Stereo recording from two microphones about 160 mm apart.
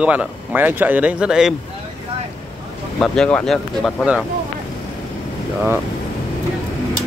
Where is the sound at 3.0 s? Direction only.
5° left (ahead or behind).